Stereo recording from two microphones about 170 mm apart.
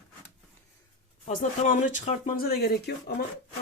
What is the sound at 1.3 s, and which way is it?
Speech, 50° left (ahead or behind).